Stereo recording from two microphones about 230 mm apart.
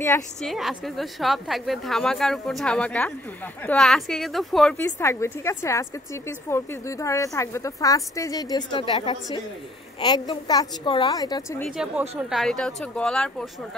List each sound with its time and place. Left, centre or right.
0.0 s a woman's voice: centre
0.5 s a woman's voice: centre
4.8 s a woman's voice: centre
11.6 s a woman's voice: centre